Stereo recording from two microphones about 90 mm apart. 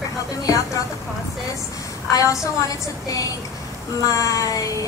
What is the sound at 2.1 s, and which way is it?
A woman's voice, 35° left (ahead or behind).